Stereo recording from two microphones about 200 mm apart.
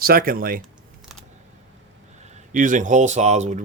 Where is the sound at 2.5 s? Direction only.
40° right (ahead or behind).